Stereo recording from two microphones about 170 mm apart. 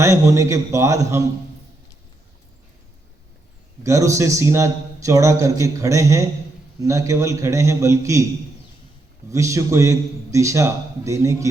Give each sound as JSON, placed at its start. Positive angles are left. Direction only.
{"t": 0.0, "sound": "a man's voice", "side_deg": -20}
{"t": 3.8, "sound": "a man's voice", "side_deg": -20}
{"t": 9.3, "sound": "a man's voice", "side_deg": -20}